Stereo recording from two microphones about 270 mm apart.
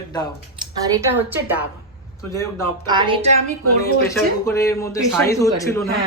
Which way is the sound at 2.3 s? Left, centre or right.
Centre.